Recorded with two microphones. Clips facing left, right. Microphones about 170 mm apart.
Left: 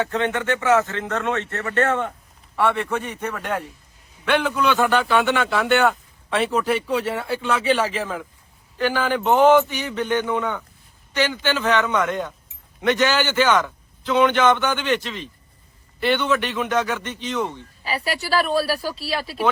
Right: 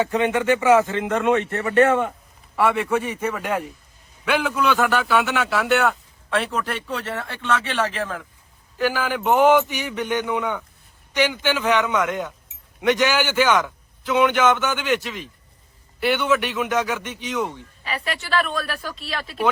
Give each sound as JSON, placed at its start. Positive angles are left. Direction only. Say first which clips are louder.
{"t": 0.0, "sound": "a man's voice", "louder": "right 3 dB", "side_deg": -10}
{"t": 17.8, "sound": "speech", "louder": "left 3 dB", "side_deg": 35}